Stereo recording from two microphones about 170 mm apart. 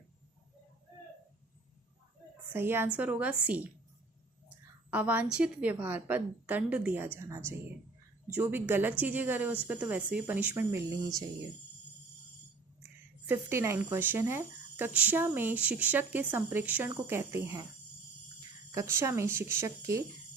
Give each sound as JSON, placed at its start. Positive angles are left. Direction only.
{"t": 2.5, "sound": "speech", "side_deg": -15}
{"t": 4.9, "sound": "speech", "side_deg": -10}
{"t": 13.2, "sound": "speech", "side_deg": -15}
{"t": 18.7, "sound": "speech", "side_deg": -15}